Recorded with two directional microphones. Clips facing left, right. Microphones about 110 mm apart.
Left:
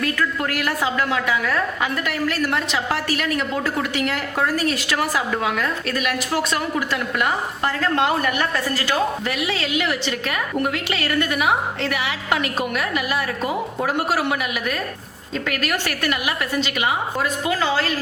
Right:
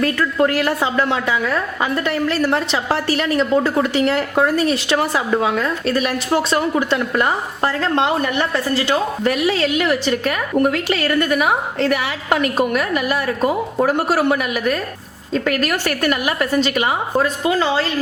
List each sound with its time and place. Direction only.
0.0 s a woman's voice: 30° right (ahead or behind)
9.2 s a woman's voice: 40° right (ahead or behind)